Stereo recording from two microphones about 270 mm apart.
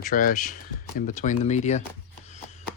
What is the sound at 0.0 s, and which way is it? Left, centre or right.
Speech, left.